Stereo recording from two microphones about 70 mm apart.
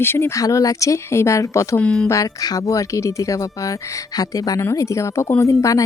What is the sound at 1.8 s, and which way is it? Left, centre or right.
Speech, centre.